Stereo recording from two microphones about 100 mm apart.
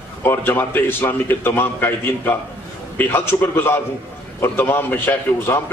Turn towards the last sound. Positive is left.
turn(degrees=20)  # may be behind; listen again after turning